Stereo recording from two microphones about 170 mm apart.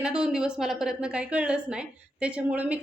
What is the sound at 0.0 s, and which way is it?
A woman's voice, 5° right (ahead or behind).